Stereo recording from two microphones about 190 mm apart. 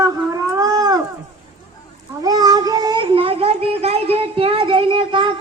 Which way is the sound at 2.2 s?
20° right (ahead or behind).